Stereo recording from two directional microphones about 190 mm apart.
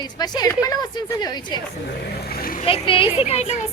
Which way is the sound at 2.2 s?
55° left (ahead or behind).